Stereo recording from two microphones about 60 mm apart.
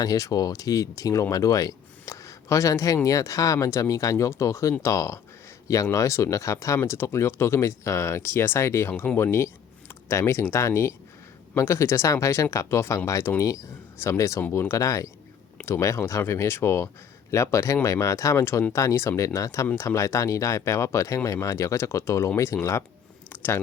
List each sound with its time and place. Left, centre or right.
0.0 s speech: left
6.7 s speech: left
13.4 s speech: left
22.5 s speech: left
23.3 s a sound: left